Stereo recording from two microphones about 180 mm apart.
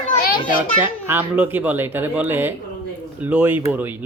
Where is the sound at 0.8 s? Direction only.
10° right (ahead or behind).